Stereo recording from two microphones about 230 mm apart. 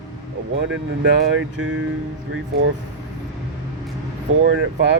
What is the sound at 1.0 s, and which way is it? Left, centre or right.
Speech, right.